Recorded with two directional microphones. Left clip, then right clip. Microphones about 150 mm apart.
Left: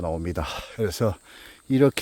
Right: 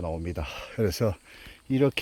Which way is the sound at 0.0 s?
35° left (ahead or behind).